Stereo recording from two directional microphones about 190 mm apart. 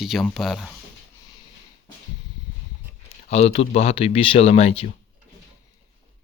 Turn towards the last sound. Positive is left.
turn(degrees=30)  # may be behind; listen again after turning